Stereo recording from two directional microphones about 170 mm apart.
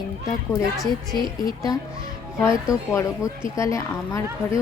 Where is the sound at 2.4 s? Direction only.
20° left (ahead or behind).